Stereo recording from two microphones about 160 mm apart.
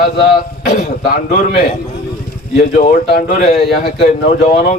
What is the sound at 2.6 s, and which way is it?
Speech, 55° left (ahead or behind).